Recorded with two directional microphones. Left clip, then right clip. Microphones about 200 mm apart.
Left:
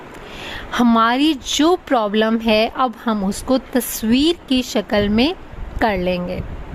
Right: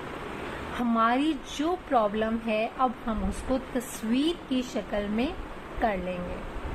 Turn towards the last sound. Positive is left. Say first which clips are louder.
# left 10 dB
turn(degrees=60)  # may be behind; listen again after turning